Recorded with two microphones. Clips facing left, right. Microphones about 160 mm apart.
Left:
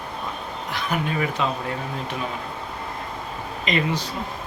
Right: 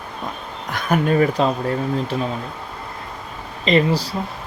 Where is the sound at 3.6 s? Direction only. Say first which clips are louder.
Right 7 dB; 35° right (ahead or behind).